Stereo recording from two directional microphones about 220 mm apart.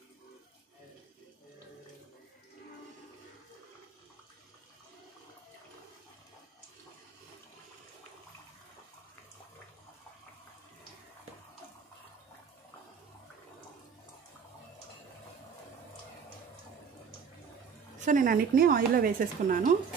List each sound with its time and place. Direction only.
17.9 s speech: 35° right (ahead or behind)